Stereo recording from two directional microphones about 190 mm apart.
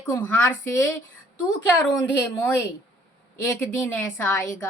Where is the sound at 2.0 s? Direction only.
10° left (ahead or behind).